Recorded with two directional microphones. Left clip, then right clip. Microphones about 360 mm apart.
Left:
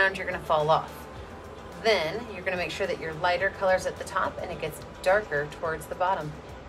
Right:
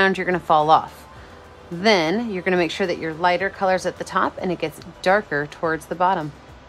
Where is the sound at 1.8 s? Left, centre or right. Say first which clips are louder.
Right 7 dB; centre.